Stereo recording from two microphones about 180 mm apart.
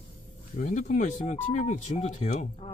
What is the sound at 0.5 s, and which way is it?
Speech, 45° left (ahead or behind).